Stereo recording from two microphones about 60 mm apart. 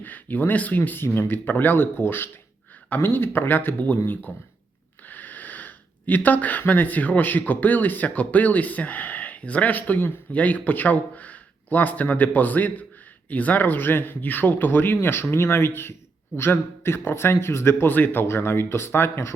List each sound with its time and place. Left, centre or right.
0.0 s a man's voice: left